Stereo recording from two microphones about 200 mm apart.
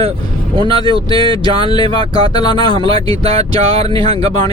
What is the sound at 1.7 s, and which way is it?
Speech, 20° left (ahead or behind).